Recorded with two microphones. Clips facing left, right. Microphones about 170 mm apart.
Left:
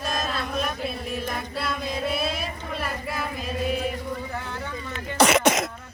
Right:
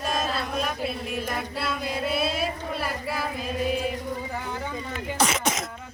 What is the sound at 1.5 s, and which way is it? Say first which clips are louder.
Music: even; 10° right (ahead or behind).